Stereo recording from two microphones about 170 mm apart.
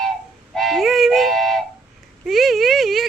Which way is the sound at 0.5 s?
Centre (ahead or behind).